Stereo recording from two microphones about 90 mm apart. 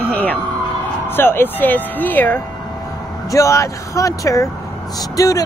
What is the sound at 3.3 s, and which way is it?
Speech, 35° left (ahead or behind).